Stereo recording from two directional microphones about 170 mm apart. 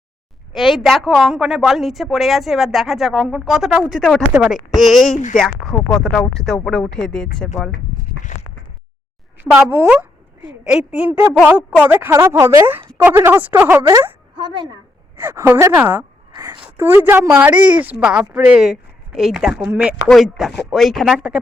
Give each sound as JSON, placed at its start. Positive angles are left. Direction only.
{"t": 0.5, "sound": "a woman's voice", "side_deg": 0}
{"t": 5.1, "sound": "speech", "side_deg": 45}
{"t": 5.4, "sound": "a woman's voice", "side_deg": 5}
{"t": 8.3, "sound": "a sound", "side_deg": 40}
{"t": 9.4, "sound": "a woman's voice", "side_deg": -10}
{"t": 14.3, "sound": "a woman's voice", "side_deg": -30}
{"t": 15.1, "sound": "a woman's voice", "side_deg": -15}
{"t": 16.3, "sound": "a sound", "side_deg": -25}
{"t": 16.6, "sound": "a woman's voice", "side_deg": -15}